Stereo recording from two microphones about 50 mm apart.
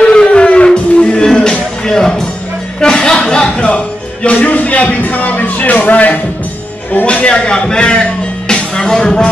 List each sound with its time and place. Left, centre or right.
0.0 s music: centre
7.1 s a sound: left
8.7 s music: centre